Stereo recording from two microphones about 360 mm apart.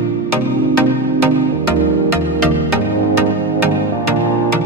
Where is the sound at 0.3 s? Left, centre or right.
Right.